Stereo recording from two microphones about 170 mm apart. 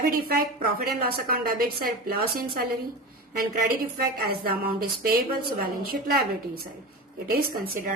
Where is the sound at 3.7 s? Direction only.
60° right (ahead or behind).